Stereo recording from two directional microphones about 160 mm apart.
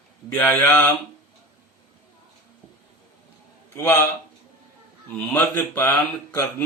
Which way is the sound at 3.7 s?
15° left (ahead or behind).